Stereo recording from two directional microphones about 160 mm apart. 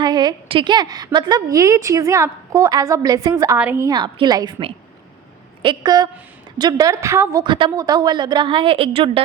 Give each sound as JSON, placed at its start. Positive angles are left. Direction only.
{"t": 0.0, "sound": "a woman's voice", "side_deg": -25}
{"t": 3.8, "sound": "a woman's voice", "side_deg": -25}
{"t": 5.6, "sound": "a woman's voice", "side_deg": -25}
{"t": 7.4, "sound": "a woman's voice", "side_deg": -30}